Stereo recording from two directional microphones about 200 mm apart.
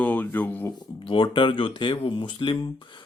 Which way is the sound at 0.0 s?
10° left (ahead or behind).